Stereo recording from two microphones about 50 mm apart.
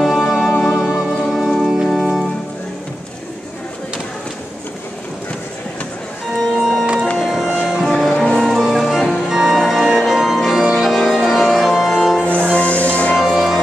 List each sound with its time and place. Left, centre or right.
0.0 s music: centre
1.9 s organ: centre
6.4 s music: centre
8.2 s music: centre
8.5 s music: centre
11.6 s organ: centre
12.5 s music: left
13.1 s music: centre